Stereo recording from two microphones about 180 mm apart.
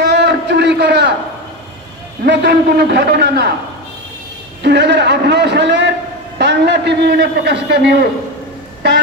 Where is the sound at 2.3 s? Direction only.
65° right (ahead or behind).